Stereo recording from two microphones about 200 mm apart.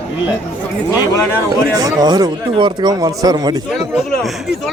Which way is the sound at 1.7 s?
20° right (ahead or behind).